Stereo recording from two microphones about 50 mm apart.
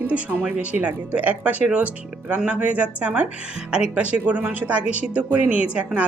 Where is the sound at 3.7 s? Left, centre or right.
Centre.